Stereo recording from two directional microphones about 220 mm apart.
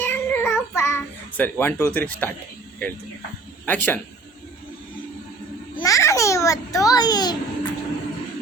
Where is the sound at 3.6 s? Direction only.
10° left (ahead or behind).